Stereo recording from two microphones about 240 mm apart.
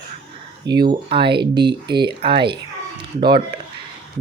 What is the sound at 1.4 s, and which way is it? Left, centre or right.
Speech, right.